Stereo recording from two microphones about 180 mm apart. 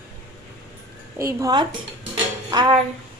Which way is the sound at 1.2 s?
20° right (ahead or behind).